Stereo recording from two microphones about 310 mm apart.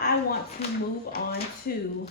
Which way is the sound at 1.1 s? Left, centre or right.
Left.